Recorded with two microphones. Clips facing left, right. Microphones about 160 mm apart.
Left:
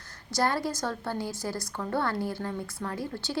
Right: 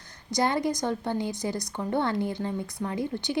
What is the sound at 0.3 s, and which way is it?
A woman's voice, 20° right (ahead or behind).